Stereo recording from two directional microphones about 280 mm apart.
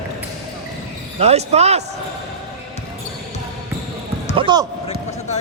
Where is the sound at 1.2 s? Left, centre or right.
Right.